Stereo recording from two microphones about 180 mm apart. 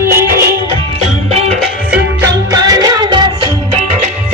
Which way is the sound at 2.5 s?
20° right (ahead or behind).